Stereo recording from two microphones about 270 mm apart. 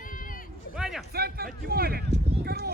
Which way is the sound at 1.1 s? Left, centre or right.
Right.